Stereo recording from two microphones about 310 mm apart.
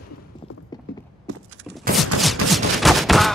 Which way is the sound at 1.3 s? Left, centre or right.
Right.